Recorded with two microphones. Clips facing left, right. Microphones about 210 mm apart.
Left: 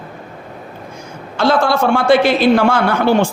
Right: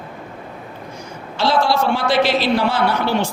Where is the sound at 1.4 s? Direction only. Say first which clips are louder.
Left 3 dB; 50° left (ahead or behind).